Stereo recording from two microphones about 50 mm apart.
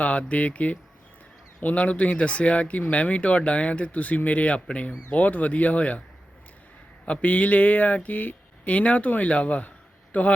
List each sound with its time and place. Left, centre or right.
0.0 s speech: left
7.0 s speech: left